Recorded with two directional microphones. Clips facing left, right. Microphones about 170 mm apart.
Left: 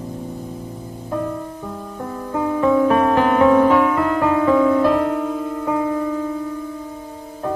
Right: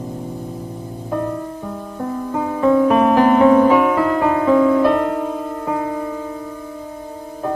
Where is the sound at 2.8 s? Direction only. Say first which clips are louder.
Right 3 dB; 10° right (ahead or behind).